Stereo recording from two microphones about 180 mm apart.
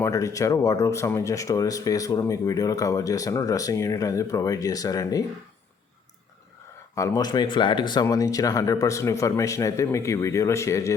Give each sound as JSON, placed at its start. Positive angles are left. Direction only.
{"t": 0.0, "sound": "speech", "side_deg": 15}
{"t": 6.9, "sound": "speech", "side_deg": 15}